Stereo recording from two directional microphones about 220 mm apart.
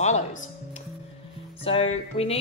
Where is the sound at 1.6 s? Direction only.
25° left (ahead or behind).